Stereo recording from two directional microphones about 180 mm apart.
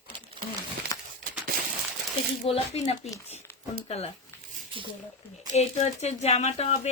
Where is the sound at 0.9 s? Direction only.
20° left (ahead or behind).